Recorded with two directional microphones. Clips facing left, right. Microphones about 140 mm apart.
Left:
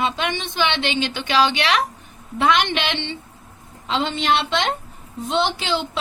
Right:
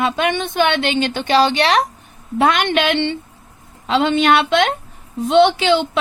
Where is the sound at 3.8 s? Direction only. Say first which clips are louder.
Right 7 dB; 60° right (ahead or behind).